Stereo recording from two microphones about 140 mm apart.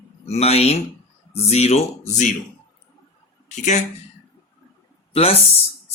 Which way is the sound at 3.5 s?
60° left (ahead or behind).